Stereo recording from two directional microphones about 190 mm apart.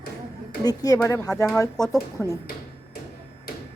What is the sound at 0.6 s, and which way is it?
A woman's voice, 20° left (ahead or behind).